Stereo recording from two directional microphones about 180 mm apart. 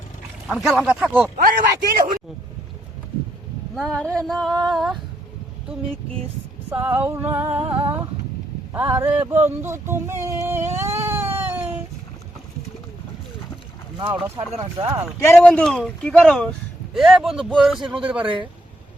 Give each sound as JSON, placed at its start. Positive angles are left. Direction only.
{"t": 0.4, "sound": "speech", "side_deg": 0}
{"t": 1.4, "sound": "speech", "side_deg": -55}
{"t": 3.8, "sound": "speech", "side_deg": 5}
{"t": 6.7, "sound": "a sound", "side_deg": -10}
{"t": 9.6, "sound": "speech", "side_deg": -15}
{"t": 14.3, "sound": "speech", "side_deg": -20}
{"t": 15.2, "sound": "speech", "side_deg": 10}